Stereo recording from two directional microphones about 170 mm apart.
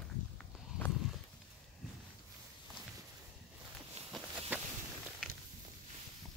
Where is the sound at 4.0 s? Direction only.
40° right (ahead or behind).